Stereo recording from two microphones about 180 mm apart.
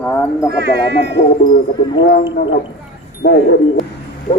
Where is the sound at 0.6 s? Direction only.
70° right (ahead or behind).